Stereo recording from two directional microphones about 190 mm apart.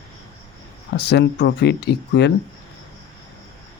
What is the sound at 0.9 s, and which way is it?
Speech, 60° left (ahead or behind).